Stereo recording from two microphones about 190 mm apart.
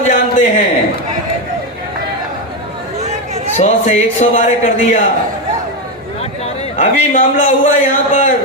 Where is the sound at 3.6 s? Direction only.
35° left (ahead or behind).